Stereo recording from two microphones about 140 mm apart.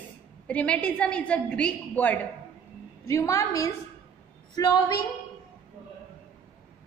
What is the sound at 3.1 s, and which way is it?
A woman's voice, 20° left (ahead or behind).